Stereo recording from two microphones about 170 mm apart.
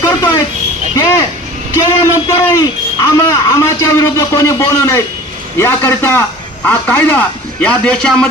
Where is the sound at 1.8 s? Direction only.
25° left (ahead or behind).